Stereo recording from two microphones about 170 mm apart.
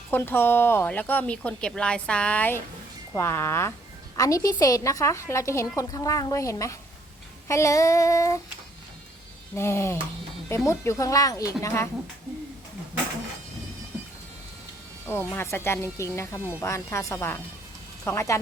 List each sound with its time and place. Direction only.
0.1 s a woman's voice: 15° left (ahead or behind)
9.6 s a woman's voice: 15° left (ahead or behind)
15.0 s speech: 10° left (ahead or behind)